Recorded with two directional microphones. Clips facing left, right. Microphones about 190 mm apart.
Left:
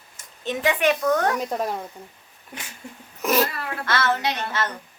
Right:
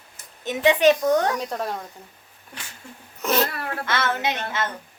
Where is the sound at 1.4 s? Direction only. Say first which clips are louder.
Left 2 dB; 10° left (ahead or behind).